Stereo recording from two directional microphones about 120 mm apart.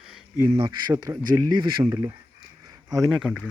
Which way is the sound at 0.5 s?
45° right (ahead or behind).